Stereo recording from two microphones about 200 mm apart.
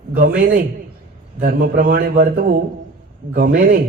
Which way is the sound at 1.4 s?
45° right (ahead or behind).